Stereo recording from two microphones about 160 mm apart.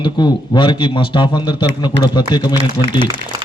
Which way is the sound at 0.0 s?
30° left (ahead or behind).